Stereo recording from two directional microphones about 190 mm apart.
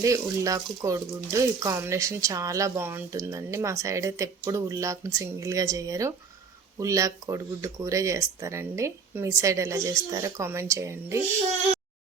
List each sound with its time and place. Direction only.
0.0 s speech: 15° right (ahead or behind)